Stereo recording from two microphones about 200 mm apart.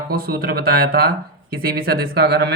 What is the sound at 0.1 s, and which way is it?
Speech, 50° right (ahead or behind).